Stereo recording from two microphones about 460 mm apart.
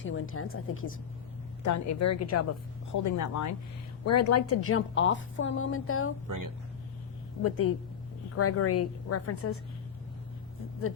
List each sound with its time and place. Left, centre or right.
0.0 s a woman's voice: left
6.2 s speech: right
7.4 s a woman's voice: left